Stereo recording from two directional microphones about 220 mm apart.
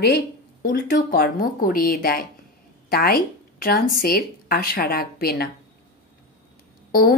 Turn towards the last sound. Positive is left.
turn(degrees=40)  # may be behind; listen again after turning